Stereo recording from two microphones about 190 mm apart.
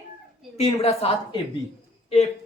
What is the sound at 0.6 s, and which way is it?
Speech, 30° left (ahead or behind).